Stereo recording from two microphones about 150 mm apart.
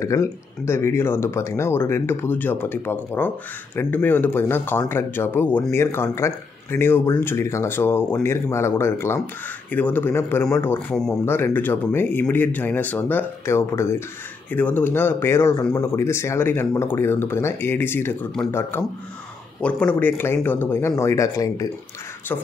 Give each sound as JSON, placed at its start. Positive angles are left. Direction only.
{"t": 0.0, "sound": "speech", "side_deg": 20}